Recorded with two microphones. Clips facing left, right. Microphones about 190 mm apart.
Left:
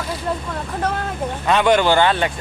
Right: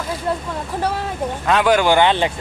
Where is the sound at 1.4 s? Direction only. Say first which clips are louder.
Even; centre (ahead or behind); by 2.3 s 20° right (ahead or behind).